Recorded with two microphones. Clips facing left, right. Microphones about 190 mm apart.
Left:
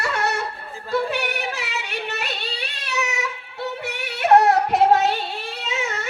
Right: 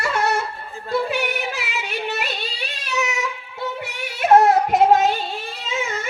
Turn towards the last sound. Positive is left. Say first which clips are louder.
# right 1 dB
turn(degrees=70)  # may be behind; listen again after turning